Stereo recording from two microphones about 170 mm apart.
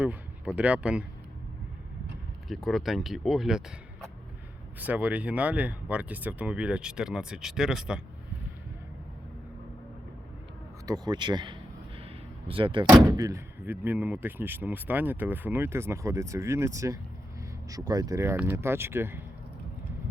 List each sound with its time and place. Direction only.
0.0 s speech: 10° right (ahead or behind)
2.5 s speech: centre (ahead or behind)
4.8 s speech: 10° right (ahead or behind)
10.8 s speech: 25° right (ahead or behind)
12.9 s speech: 15° right (ahead or behind)